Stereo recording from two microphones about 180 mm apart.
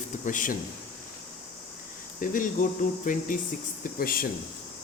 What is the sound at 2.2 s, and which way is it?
Speech, 45° left (ahead or behind).